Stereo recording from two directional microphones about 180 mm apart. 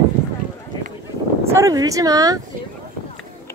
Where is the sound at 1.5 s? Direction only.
20° right (ahead or behind).